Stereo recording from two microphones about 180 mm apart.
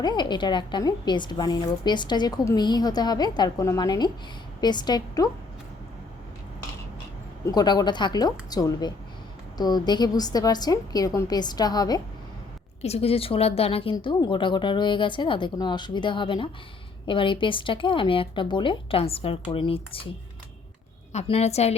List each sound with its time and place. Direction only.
0.0 s a woman's voice: 25° left (ahead or behind)
7.4 s a woman's voice: 25° left (ahead or behind)
12.8 s a woman's voice: 35° left (ahead or behind)
21.1 s a woman's voice: 35° left (ahead or behind)